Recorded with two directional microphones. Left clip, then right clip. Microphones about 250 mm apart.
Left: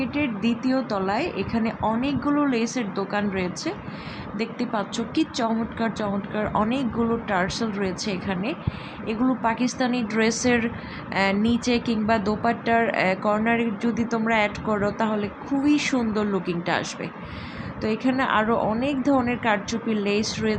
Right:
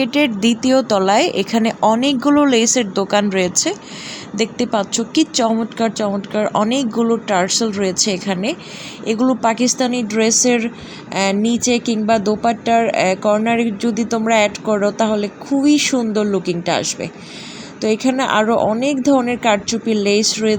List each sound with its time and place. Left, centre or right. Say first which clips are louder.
0.0 s a woman's voice: right 10 dB; right